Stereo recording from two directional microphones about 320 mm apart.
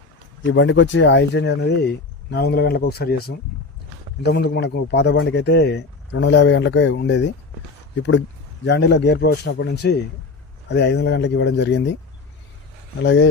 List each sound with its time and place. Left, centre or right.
0.5 s speech: left
8.6 s speech: left
13.0 s speech: left